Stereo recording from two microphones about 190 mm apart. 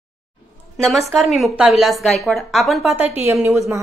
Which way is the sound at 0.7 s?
Centre (ahead or behind).